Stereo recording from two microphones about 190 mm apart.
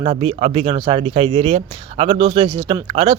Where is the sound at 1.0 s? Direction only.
30° right (ahead or behind).